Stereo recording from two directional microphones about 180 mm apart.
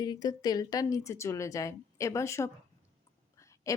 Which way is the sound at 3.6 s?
20° left (ahead or behind).